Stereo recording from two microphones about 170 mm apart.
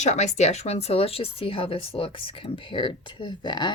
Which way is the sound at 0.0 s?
40° left (ahead or behind).